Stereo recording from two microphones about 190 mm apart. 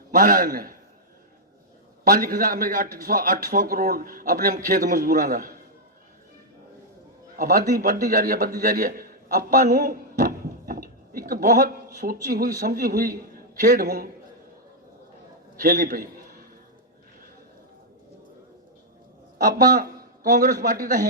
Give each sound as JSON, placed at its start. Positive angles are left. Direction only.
{"t": 0.1, "sound": "a man's voice", "side_deg": -45}
{"t": 2.0, "sound": "a man's voice", "side_deg": -50}
{"t": 7.3, "sound": "a man's voice", "side_deg": -50}
{"t": 8.6, "sound": "a sound", "side_deg": -50}
{"t": 11.9, "sound": "a man's voice", "side_deg": -45}
{"t": 15.6, "sound": "a man's voice", "side_deg": -50}
{"t": 19.4, "sound": "a man's voice", "side_deg": -50}